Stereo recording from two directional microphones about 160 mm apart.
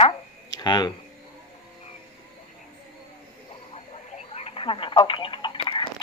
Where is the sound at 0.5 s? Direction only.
25° left (ahead or behind).